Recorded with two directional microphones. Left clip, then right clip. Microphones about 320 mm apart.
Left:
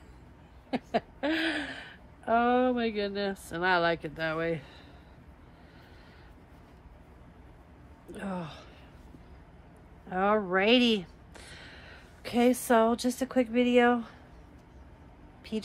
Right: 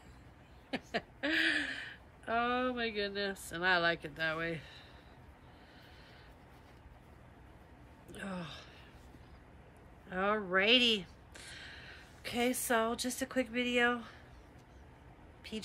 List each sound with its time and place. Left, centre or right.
0.7 s a sound: centre
8.1 s speech: centre
10.0 s speech: centre
15.5 s vehicle: centre